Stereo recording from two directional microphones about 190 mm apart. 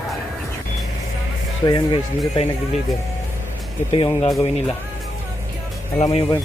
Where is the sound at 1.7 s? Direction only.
25° left (ahead or behind).